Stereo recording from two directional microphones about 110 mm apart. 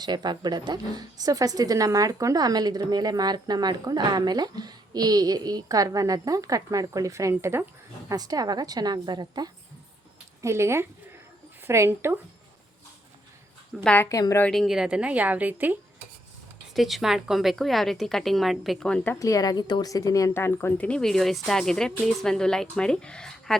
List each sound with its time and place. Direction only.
0.0 s a woman's voice: 40° right (ahead or behind)
10.4 s speech: 25° right (ahead or behind)
13.8 s a woman's voice: 15° left (ahead or behind)
14.1 s a woman's voice: 30° left (ahead or behind)
14.4 s a woman's voice: centre (ahead or behind); by 15.8 s 15° right (ahead or behind)
16.7 s a woman's voice: centre (ahead or behind)
18.9 s a woman's voice: 10° left (ahead or behind)
19.2 s a woman's voice: 30° left (ahead or behind); by 23.6 s 5° left (ahead or behind)